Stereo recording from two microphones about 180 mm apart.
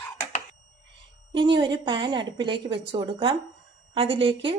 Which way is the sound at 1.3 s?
25° right (ahead or behind).